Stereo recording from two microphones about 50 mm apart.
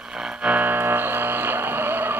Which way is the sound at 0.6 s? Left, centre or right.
Right.